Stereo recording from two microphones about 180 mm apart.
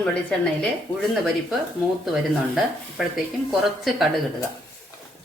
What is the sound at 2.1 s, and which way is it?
Speech, 5° right (ahead or behind).